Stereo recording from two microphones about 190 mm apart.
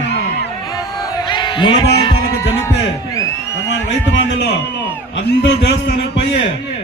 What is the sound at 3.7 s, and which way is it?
A man's voice, 70° left (ahead or behind).